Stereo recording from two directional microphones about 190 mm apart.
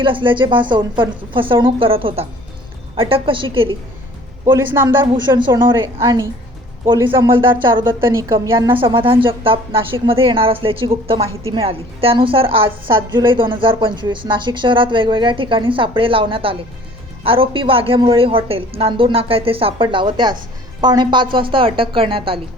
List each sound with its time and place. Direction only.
0.0 s a woman's voice: 25° right (ahead or behind)
4.5 s a woman's voice: 15° right (ahead or behind)
5.1 s a woman's voice: 25° right (ahead or behind)
8.7 s a woman's voice: 25° right (ahead or behind)